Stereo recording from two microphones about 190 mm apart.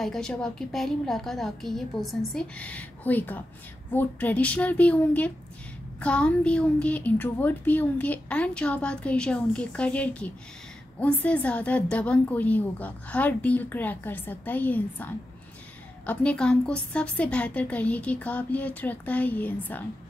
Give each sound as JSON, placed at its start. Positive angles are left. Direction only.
{"t": 0.0, "sound": "a woman's voice", "side_deg": 0}
{"t": 16.1, "sound": "a woman's voice", "side_deg": 5}